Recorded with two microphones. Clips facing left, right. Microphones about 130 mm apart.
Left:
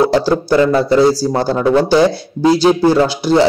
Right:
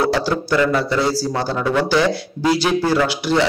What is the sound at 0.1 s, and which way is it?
Speech, 35° left (ahead or behind).